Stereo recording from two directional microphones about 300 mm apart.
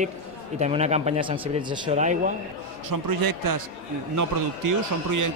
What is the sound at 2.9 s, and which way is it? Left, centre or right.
Speech, right.